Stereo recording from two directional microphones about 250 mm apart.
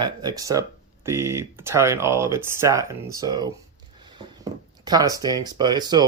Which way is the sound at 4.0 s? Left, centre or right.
Centre.